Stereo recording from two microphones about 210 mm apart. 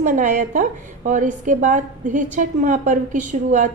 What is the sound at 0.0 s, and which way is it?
A woman's voice, 40° right (ahead or behind).